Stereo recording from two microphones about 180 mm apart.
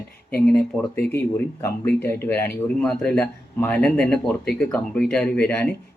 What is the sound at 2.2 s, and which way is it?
A man's voice, 10° left (ahead or behind).